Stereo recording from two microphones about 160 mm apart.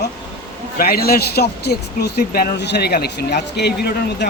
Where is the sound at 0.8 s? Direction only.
70° left (ahead or behind).